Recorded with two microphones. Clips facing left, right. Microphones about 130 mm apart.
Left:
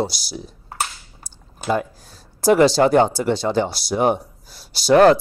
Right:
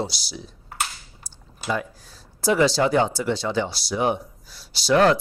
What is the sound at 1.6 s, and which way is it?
Speech, 45° left (ahead or behind).